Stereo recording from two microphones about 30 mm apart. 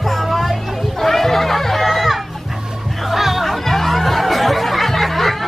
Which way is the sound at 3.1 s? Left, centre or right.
Centre.